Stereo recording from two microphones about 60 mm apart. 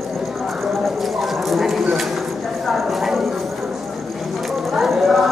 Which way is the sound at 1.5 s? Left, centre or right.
Centre.